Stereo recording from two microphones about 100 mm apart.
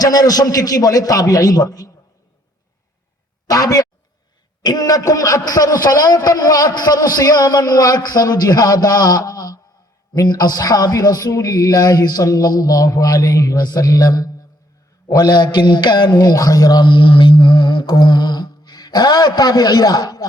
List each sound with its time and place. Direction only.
0.0 s a man's voice: 40° left (ahead or behind)
3.4 s a man's voice: 35° left (ahead or behind)
16.8 s music: 55° left (ahead or behind)
17.8 s speech: 45° left (ahead or behind)